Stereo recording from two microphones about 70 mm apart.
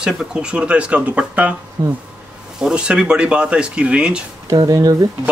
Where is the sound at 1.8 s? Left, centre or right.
Right.